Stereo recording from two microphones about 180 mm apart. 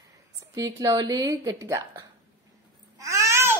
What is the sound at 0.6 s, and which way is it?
A woman's voice, 20° right (ahead or behind).